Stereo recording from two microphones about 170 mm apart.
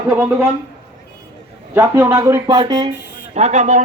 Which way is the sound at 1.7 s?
15° right (ahead or behind).